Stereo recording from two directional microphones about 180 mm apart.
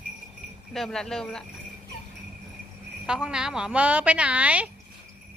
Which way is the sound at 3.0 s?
5° right (ahead or behind).